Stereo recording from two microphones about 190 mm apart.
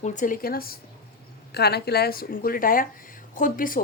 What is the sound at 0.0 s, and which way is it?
A woman's voice, 40° left (ahead or behind).